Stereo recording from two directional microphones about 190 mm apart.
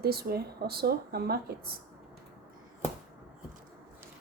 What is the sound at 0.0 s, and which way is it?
Speech, 55° right (ahead or behind).